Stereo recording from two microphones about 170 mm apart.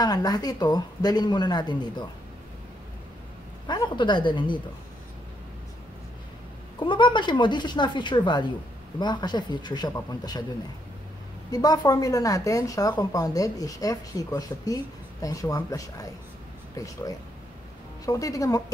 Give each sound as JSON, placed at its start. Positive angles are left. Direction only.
{"t": 0.0, "sound": "speech", "side_deg": 25}
{"t": 3.6, "sound": "speech", "side_deg": 25}
{"t": 6.8, "sound": "speech", "side_deg": 30}
{"t": 11.5, "sound": "speech", "side_deg": 25}